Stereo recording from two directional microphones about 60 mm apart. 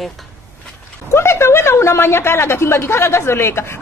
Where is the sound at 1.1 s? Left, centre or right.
Left.